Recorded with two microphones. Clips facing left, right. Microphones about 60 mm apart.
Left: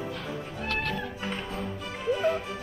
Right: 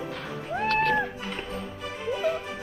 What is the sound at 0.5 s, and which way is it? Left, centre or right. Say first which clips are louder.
Run: right 9 dB; right.